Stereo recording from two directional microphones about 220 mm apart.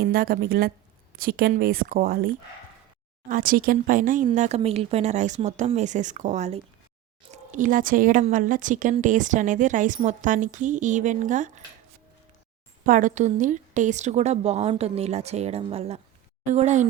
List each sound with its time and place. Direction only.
0.0 s speech: 45° right (ahead or behind)
12.8 s a woman's voice: 35° right (ahead or behind)